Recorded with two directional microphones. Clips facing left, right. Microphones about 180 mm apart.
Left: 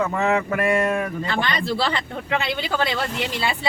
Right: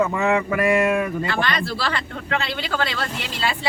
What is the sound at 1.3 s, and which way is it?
Speech, 20° left (ahead or behind).